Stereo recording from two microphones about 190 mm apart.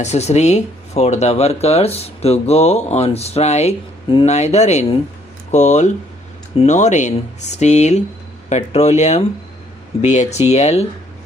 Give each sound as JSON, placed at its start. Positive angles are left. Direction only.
{"t": 0.0, "sound": "speech", "side_deg": 35}